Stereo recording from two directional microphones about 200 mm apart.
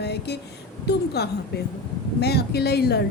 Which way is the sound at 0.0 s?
55° left (ahead or behind).